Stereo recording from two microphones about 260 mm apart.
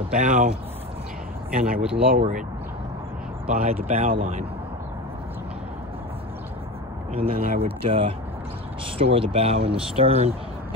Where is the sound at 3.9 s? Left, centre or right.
Right.